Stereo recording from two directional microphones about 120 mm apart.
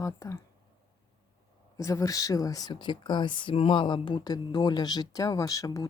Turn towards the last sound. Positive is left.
turn(degrees=30)  # may be behind; listen again after turning